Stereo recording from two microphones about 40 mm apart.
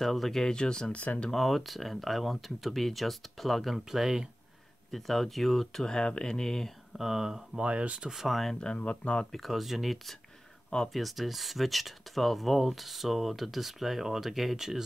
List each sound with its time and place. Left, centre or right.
0.0 s speech: centre
0.9 s speech: left
1.3 s speech: centre
4.9 s speech: centre
5.9 s speech: left
7.0 s speech: centre
7.5 s speech: right
8.1 s speech: centre
8.7 s speech: left
9.3 s speech: centre